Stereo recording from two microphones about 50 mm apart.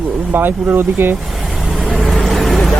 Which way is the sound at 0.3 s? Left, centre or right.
Right.